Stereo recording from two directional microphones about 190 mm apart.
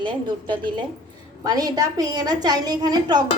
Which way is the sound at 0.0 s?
25° right (ahead or behind).